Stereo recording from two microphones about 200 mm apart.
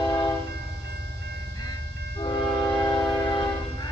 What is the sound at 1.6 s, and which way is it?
Train, 20° left (ahead or behind).